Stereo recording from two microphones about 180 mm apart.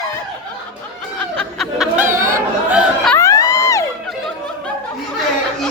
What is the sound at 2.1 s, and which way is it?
Chatter, 50° right (ahead or behind).